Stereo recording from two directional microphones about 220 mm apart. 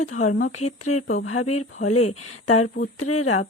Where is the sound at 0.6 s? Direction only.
30° left (ahead or behind).